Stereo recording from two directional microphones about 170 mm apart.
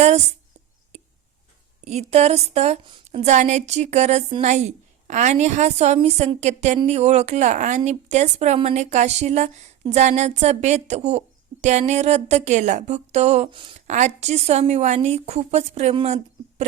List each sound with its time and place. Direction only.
0.9 s a sound: 40° right (ahead or behind)
1.8 s a woman's voice: 40° right (ahead or behind)
13.8 s a woman's voice: 45° right (ahead or behind)